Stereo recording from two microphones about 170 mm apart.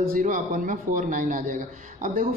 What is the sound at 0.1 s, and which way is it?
Speech, 50° right (ahead or behind).